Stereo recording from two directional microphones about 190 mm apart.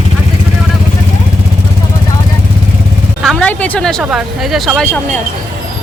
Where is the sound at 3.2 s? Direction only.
Centre (ahead or behind).